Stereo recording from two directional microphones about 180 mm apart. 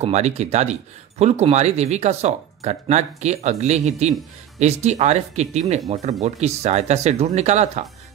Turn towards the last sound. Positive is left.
turn(degrees=-40)  # may be behind; listen again after turning